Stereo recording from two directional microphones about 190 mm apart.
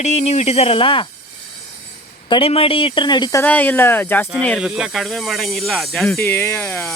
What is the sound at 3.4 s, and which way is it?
Speech, 10° left (ahead or behind).